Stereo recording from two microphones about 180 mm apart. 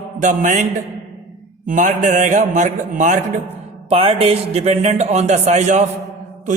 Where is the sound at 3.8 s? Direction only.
30° right (ahead or behind).